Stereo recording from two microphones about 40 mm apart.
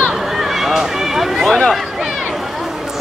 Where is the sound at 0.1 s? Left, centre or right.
Centre.